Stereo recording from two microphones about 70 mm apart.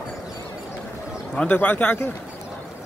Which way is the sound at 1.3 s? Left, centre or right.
Centre.